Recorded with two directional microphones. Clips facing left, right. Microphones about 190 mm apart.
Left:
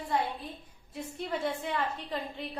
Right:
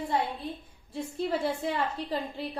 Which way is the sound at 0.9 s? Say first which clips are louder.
Right 5 dB; 35° right (ahead or behind).